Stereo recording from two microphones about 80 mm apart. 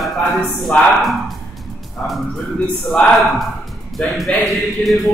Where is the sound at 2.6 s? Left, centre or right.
Centre.